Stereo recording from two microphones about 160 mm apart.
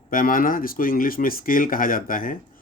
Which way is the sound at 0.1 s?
60° left (ahead or behind).